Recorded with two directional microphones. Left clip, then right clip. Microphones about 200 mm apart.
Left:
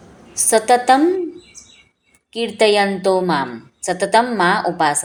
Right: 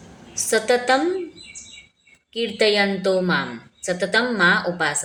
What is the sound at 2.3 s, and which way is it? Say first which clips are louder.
A woman's voice: left 4 dB; 20° left (ahead or behind).